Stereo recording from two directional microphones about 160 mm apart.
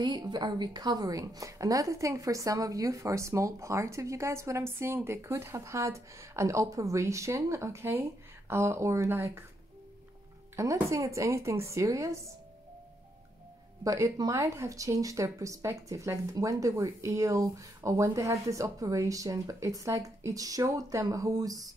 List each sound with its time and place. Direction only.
0.0 s a woman's voice: 25° right (ahead or behind)
10.5 s a woman's voice: 20° right (ahead or behind)
13.8 s a woman's voice: 20° right (ahead or behind)